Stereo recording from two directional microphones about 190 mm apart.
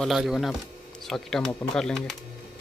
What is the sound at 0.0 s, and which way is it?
Speech, centre (ahead or behind).